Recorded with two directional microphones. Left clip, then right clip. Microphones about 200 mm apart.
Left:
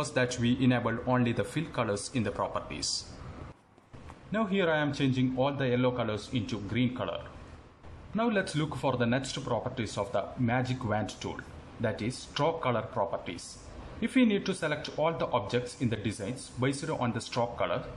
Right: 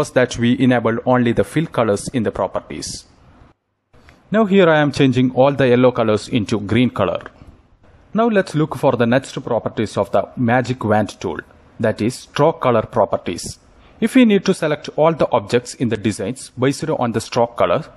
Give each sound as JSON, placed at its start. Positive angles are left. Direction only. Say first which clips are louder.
{"t": 0.0, "sound": "speech", "louder": "right 13 dB", "side_deg": -40}
{"t": 4.3, "sound": "speech", "louder": "right 16 dB", "side_deg": -50}
{"t": 8.2, "sound": "speech", "louder": "right 14 dB", "side_deg": -45}